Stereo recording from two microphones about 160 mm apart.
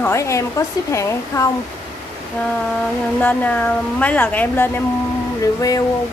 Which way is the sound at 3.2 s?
10° left (ahead or behind).